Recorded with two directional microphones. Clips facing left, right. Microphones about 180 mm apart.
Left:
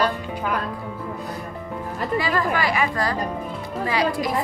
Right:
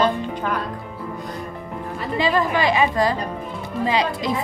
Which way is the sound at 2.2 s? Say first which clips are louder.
Right 5 dB; 20° right (ahead or behind).